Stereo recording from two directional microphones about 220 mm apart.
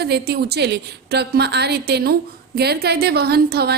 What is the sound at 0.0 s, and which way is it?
A woman's voice, 45° right (ahead or behind).